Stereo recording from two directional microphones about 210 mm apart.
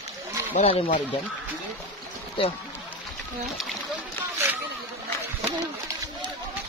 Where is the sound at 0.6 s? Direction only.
30° left (ahead or behind).